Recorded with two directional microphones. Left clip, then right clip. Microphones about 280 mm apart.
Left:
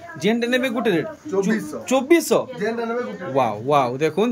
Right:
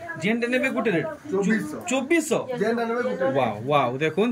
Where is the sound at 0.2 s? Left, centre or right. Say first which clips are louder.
Left 4 dB; centre.